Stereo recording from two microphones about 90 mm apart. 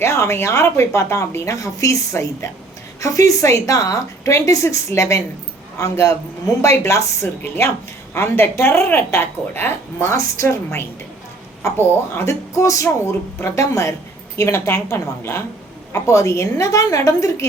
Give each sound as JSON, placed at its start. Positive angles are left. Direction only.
{"t": 0.0, "sound": "a woman's voice", "side_deg": 35}
{"t": 12.1, "sound": "speech", "side_deg": 30}